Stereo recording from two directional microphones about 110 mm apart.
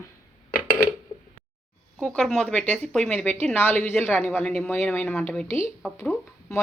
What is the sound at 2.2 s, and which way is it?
A woman's voice, 5° left (ahead or behind).